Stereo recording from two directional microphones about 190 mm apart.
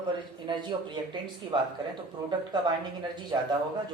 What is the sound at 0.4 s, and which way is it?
Speech, 25° right (ahead or behind).